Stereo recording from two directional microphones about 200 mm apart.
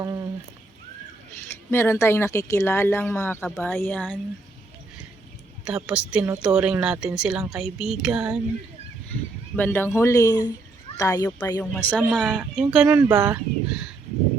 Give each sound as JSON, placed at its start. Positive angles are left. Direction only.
{"t": 0.0, "sound": "a sound", "side_deg": -20}
{"t": 1.7, "sound": "speech", "side_deg": 10}
{"t": 5.6, "sound": "speech", "side_deg": -5}
{"t": 9.6, "sound": "speech", "side_deg": 10}
{"t": 11.9, "sound": "speech", "side_deg": -5}